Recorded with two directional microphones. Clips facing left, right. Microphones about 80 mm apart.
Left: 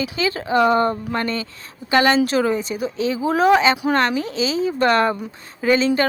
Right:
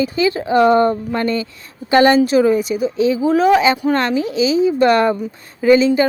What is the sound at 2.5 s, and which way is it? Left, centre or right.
Speech, left.